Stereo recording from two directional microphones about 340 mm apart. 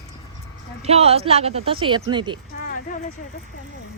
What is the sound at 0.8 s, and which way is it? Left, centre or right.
A woman's voice, centre.